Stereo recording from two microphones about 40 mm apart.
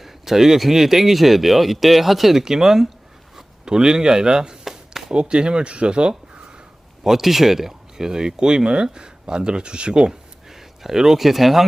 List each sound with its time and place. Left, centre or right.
0.0 s speech: centre
2.4 s speech: centre
3.3 s a sound: centre
5.1 s speech: right
7.0 s speech: centre; by 10.1 s right
10.1 s a sound: centre